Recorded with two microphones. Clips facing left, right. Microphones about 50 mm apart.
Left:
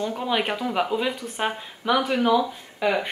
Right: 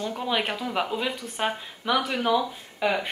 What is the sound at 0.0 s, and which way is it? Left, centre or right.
A woman's voice, centre.